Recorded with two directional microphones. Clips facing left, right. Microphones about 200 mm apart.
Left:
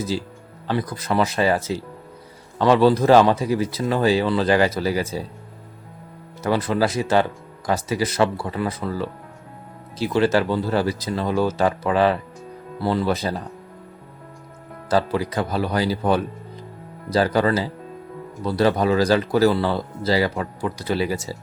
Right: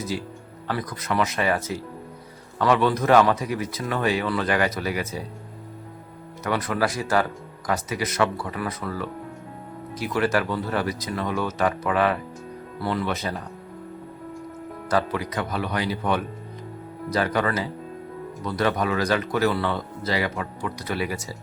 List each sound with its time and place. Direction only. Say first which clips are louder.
0.7 s speech: left 4 dB; 30° left (ahead or behind)
6.4 s a man's voice: left 4 dB; 30° left (ahead or behind)
14.8 s a man's voice: left 4 dB; 30° left (ahead or behind)